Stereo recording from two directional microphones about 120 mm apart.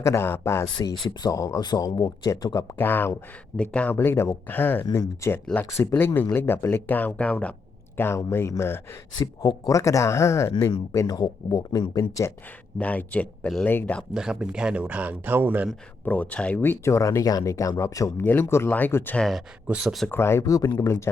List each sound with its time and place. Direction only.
0.0 s speech: 20° left (ahead or behind)
0.8 s speech: 40° left (ahead or behind)
2.7 s speech: 15° left (ahead or behind)
9.1 s speech: 35° left (ahead or behind)
10.9 s speech: 35° left (ahead or behind)
12.8 s speech: 10° left (ahead or behind)
14.1 s speech: 5° right (ahead or behind)
16.0 s speech: 15° left (ahead or behind)
18.2 s speech: 15° left (ahead or behind)
19.1 s speech: 5° left (ahead or behind)
19.6 s speech: 5° right (ahead or behind)
20.1 s speech: 20° left (ahead or behind)